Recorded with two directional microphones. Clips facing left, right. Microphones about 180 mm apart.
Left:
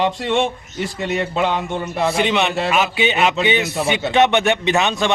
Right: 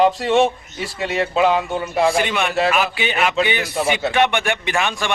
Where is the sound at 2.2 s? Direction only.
25° left (ahead or behind).